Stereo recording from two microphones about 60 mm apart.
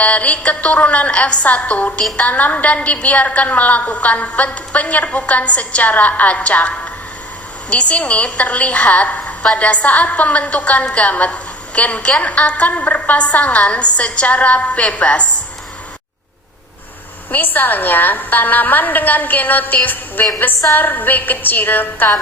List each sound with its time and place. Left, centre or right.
0.0 s a woman's voice: left
17.3 s a woman's voice: left